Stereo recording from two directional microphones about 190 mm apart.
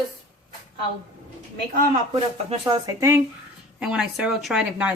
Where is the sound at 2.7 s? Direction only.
15° right (ahead or behind).